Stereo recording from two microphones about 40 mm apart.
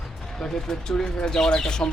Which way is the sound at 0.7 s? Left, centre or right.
Centre.